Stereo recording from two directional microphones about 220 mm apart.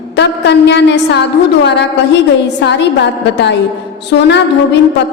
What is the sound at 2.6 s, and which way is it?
A woman's voice, 50° left (ahead or behind).